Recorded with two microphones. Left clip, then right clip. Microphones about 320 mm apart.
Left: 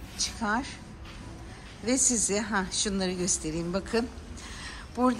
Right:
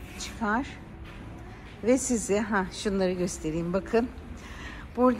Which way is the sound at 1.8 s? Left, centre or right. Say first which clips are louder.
Right 2 dB; centre.